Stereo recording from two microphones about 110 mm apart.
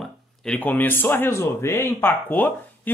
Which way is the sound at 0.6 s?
15° left (ahead or behind).